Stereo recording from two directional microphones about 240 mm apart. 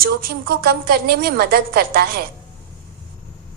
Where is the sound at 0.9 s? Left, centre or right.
Right.